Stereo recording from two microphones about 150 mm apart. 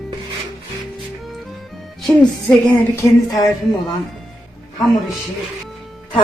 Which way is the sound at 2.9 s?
20° left (ahead or behind).